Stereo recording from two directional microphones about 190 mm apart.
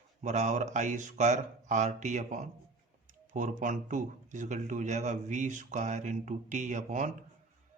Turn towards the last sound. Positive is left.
turn(degrees=-40)  # may be behind; listen again after turning